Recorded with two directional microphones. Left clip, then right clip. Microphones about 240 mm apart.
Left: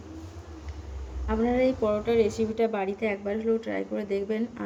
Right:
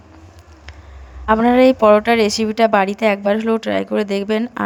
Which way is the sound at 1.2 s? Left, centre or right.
Right.